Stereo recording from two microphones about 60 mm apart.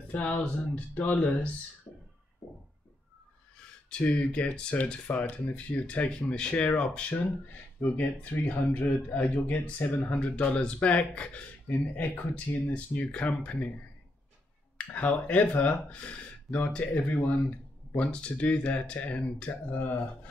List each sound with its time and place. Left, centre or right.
0.1 s speech: left
3.9 s speech: left
6.5 s speech: left
15.0 s speech: left